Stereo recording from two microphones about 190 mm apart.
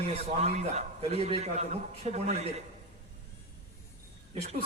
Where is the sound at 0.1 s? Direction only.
30° right (ahead or behind).